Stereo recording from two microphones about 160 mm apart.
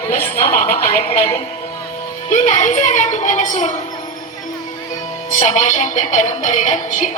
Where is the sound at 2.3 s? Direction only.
50° left (ahead or behind).